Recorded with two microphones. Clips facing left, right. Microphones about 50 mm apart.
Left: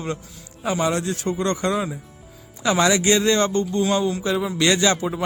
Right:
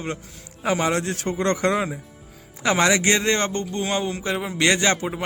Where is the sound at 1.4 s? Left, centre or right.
Right.